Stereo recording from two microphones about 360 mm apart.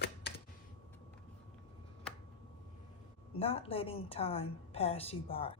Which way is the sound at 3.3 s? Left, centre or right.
Centre.